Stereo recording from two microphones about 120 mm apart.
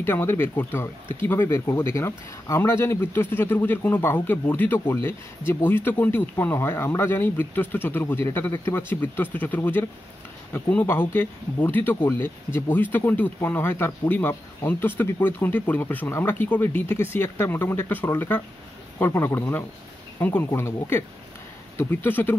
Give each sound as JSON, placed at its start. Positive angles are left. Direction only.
{"t": 0.0, "sound": "speech", "side_deg": 20}